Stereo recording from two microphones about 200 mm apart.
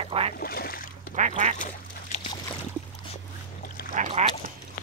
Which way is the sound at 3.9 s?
35° right (ahead or behind).